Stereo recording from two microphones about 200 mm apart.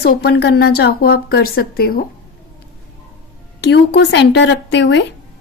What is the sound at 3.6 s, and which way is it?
Speech, 60° left (ahead or behind).